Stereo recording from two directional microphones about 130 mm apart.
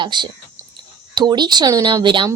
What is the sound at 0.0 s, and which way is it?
A woman's voice, 35° right (ahead or behind).